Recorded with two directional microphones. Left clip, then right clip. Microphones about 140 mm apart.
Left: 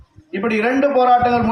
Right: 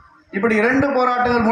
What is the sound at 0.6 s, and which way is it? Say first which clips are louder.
Speech: left 2 dB; 30° right (ahead or behind).